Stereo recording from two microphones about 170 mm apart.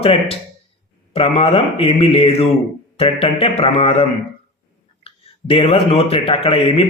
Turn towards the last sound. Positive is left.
turn(degrees=35)  # may be behind; listen again after turning